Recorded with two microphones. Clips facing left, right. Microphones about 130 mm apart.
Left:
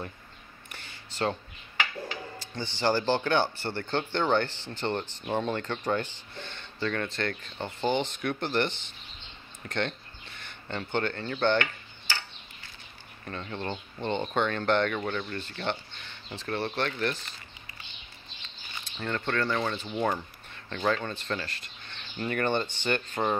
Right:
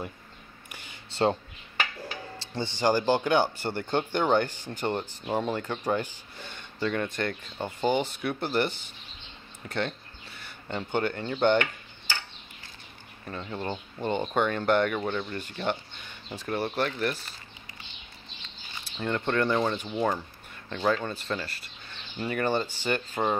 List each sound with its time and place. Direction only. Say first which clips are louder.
1.1 s speech: right 5 dB; 25° right (ahead or behind)
2.3 s music: right 4 dB; 30° right (ahead or behind)
2.8 s speech: right 2 dB; 15° right (ahead or behind)
9.7 s a sound: even; 5° right (ahead or behind)
13.2 s speech: right 1 dB; 10° right (ahead or behind)
18.9 s speech: right 3 dB; 15° right (ahead or behind)